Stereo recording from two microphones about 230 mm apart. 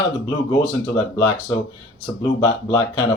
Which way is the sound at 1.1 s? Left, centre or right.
Centre.